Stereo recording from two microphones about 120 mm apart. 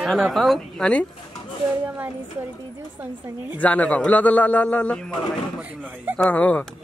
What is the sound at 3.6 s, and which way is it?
A man's voice, 10° left (ahead or behind).